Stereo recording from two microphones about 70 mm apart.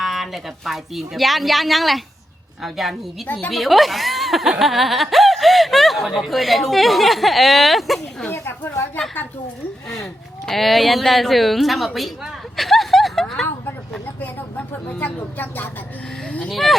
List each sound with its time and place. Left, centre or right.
0.0 s speech: centre
8.3 s speech: left
10.4 s speech: centre
11.9 s a sound: centre
14.2 s a sound: left
14.8 s speech: left
16.5 s speech: centre